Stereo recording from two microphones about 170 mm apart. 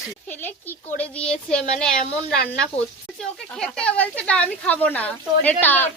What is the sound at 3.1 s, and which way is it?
Speech, 5° left (ahead or behind).